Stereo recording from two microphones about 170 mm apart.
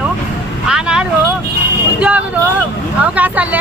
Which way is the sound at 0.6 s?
5° right (ahead or behind).